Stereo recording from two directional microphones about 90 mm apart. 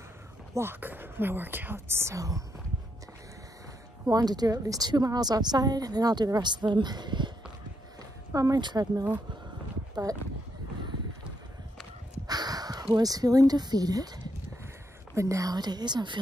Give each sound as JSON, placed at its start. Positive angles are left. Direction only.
{"t": 0.6, "sound": "speech", "side_deg": -25}
{"t": 4.1, "sound": "a woman's voice", "side_deg": -45}
{"t": 8.3, "sound": "speech", "side_deg": -40}
{"t": 8.5, "sound": "a woman's voice", "side_deg": -50}
{"t": 12.3, "sound": "a woman's voice", "side_deg": -45}